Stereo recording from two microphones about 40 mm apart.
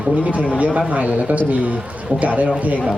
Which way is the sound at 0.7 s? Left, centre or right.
Right.